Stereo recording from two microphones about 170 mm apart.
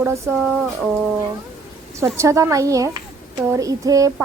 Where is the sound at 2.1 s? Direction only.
15° right (ahead or behind).